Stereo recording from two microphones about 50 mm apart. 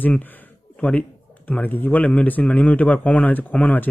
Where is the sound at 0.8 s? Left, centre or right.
Left.